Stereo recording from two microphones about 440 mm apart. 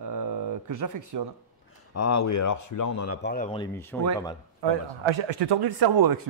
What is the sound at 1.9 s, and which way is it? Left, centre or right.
Speech, left.